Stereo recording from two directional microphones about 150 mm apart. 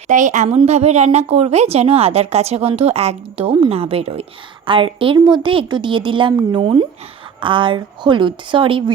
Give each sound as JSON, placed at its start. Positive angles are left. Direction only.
{"t": 0.1, "sound": "a woman's voice", "side_deg": -55}